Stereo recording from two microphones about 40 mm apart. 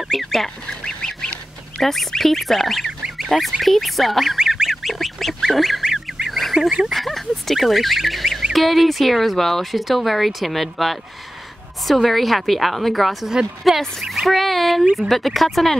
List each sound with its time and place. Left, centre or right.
0.0 s goose: centre
0.7 s goose: centre
1.8 s duck: centre
3.6 s speech: centre
4.4 s goose: centre
6.9 s speech: centre